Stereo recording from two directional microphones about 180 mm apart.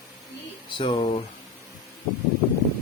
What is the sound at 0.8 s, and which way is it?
Speech, 25° left (ahead or behind).